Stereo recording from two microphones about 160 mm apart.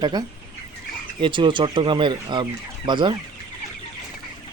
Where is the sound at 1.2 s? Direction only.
30° right (ahead or behind).